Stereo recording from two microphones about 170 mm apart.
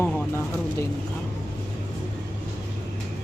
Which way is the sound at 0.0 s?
15° left (ahead or behind).